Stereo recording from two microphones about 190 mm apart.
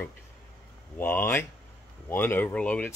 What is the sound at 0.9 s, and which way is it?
Speech, 10° left (ahead or behind).